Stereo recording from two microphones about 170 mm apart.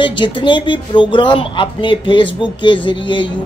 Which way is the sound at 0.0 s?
30° left (ahead or behind).